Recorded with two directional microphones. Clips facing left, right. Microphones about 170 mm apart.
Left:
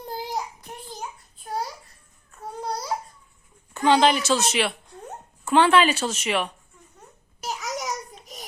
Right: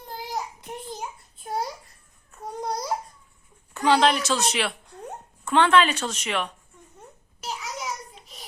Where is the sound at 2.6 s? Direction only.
15° right (ahead or behind).